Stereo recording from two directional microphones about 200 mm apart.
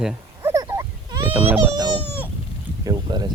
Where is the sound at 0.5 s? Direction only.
15° right (ahead or behind).